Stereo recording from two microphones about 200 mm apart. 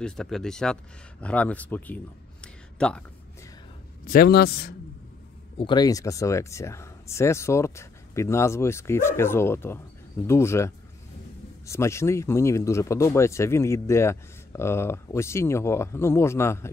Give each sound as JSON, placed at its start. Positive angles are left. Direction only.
{"t": 0.0, "sound": "speech", "side_deg": 5}
{"t": 2.4, "sound": "a sound", "side_deg": 5}
{"t": 4.0, "sound": "a man's voice", "side_deg": 50}
{"t": 5.6, "sound": "speech", "side_deg": 20}